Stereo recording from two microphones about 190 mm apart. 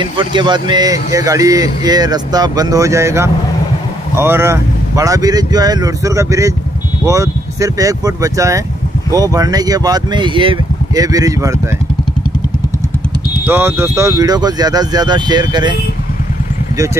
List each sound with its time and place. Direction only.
0.4 s speech: 25° right (ahead or behind)
13.3 s speech: 10° right (ahead or behind)